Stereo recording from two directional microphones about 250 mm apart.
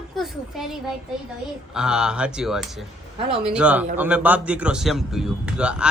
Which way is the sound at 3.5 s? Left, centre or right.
Centre.